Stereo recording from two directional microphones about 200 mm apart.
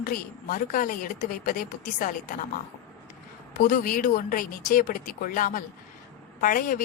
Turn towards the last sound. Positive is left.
turn(degrees=45)  # may be behind; listen again after turning